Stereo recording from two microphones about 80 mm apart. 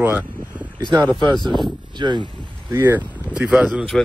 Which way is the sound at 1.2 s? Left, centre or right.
Right.